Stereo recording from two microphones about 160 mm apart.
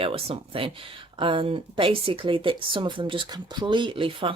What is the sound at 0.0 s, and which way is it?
Speech, 35° right (ahead or behind).